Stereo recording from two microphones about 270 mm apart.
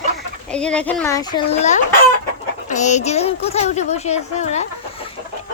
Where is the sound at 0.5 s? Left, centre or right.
Centre.